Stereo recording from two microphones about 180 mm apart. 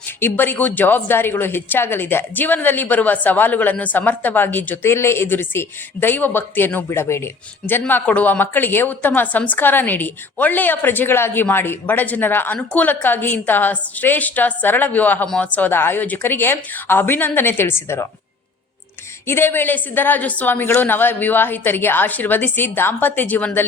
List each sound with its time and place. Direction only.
0.2 s a woman's voice: 10° left (ahead or behind)
19.3 s a woman's voice: 10° left (ahead or behind)